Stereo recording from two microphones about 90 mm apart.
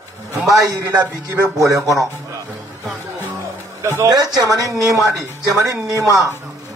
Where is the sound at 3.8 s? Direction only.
30° right (ahead or behind).